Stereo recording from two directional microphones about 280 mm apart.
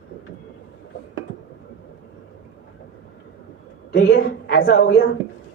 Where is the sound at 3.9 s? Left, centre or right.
Left.